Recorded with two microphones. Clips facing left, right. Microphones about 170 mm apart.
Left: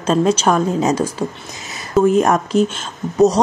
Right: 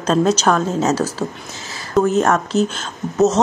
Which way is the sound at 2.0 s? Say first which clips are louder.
Left 2 dB; 10° left (ahead or behind).